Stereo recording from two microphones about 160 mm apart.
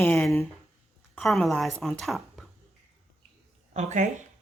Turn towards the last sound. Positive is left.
turn(degrees=-50)  # may be behind; listen again after turning